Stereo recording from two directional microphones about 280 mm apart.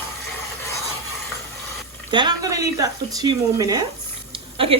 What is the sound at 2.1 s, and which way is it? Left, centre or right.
A woman's voice, centre.